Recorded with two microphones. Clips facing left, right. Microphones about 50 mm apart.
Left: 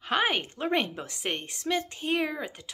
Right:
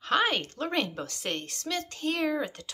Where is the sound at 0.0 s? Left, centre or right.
Centre.